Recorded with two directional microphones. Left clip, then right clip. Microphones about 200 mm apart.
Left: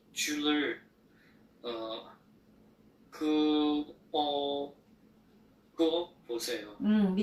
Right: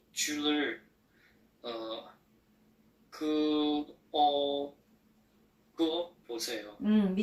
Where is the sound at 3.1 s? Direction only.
30° right (ahead or behind).